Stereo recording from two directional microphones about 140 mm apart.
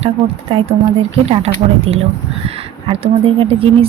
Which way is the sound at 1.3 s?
45° right (ahead or behind).